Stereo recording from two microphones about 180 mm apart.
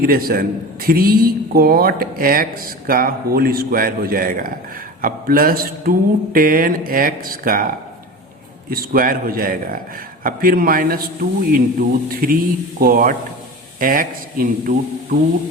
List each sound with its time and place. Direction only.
0.0 s a man's voice: 55° right (ahead or behind)
8.7 s a man's voice: 55° right (ahead or behind)